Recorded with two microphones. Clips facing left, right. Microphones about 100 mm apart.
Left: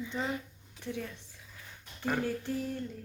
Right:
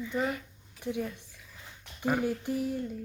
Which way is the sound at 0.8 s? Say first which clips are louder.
Right 5 dB; 15° right (ahead or behind).